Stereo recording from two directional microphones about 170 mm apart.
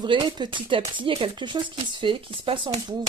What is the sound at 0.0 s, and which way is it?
Speech, 25° right (ahead or behind).